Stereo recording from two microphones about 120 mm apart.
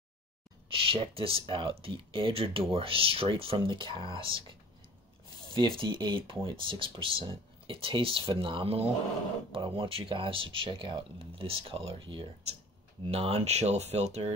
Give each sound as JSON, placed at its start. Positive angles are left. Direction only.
{"t": 0.7, "sound": "speech", "side_deg": -50}